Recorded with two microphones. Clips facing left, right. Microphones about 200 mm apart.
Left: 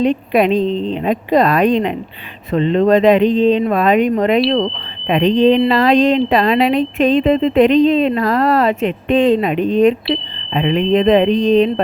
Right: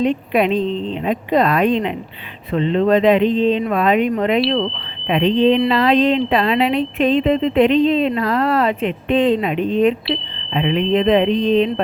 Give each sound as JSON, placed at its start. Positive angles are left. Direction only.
{"t": 0.3, "sound": "speech", "side_deg": 40}